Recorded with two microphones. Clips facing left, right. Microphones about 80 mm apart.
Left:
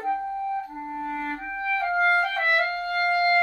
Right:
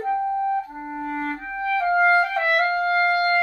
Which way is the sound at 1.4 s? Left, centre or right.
Centre.